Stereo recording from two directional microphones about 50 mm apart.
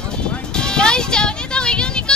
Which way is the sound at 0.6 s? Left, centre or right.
Centre.